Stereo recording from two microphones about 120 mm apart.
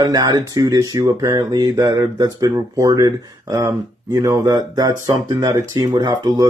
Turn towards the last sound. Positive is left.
turn(degrees=-35)  # may be behind; listen again after turning